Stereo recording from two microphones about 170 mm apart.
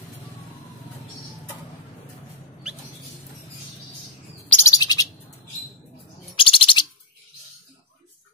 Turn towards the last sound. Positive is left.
turn(degrees=30)  # may be behind; listen again after turning